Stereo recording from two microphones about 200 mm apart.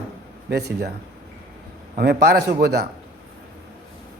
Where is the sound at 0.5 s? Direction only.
55° right (ahead or behind).